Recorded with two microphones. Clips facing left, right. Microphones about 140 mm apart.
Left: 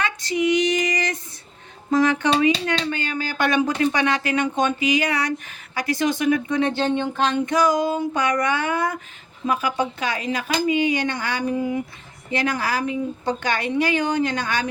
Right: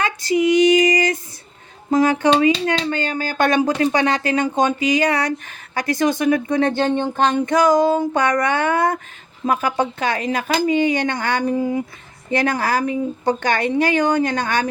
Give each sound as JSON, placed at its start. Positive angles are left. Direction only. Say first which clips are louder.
{"t": 0.0, "sound": "female singing", "louder": "right 4 dB", "side_deg": -35}
{"t": 1.9, "sound": "speech", "louder": "right 3 dB", "side_deg": -30}